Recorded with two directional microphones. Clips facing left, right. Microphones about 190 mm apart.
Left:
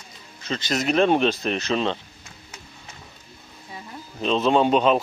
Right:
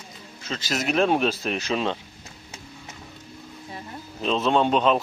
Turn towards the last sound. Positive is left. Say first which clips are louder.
# left 2 dB
turn(degrees=0)  # may be behind; listen again after turning